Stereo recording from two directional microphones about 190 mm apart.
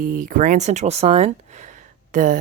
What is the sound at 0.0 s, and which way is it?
Speech, 45° right (ahead or behind).